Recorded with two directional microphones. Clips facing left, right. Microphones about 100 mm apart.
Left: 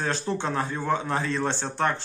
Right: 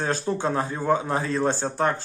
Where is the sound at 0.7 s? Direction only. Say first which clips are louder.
Right 3 dB; 15° right (ahead or behind).